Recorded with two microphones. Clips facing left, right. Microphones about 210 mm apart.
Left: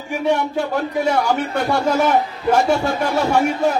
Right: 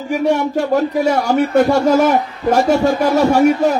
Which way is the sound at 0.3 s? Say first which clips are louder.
Right 3 dB; 40° right (ahead or behind).